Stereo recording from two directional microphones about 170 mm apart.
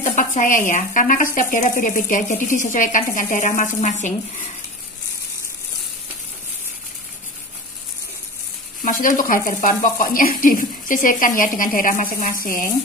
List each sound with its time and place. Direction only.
0.0 s speech: 45° left (ahead or behind)
8.8 s speech: 50° left (ahead or behind)